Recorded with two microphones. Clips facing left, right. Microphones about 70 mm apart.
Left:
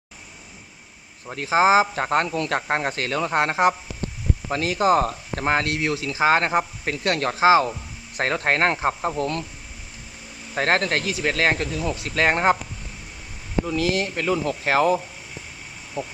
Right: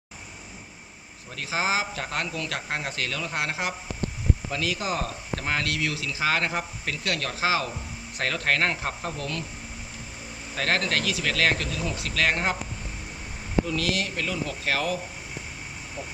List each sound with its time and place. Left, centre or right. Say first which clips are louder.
1.3 s speech: left 10 dB; left
10.5 s speech: left 5 dB; left
13.7 s speech: left 4 dB; left
16.0 s speech: left 8 dB; left